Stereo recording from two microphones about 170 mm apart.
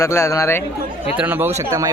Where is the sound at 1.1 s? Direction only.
10° right (ahead or behind).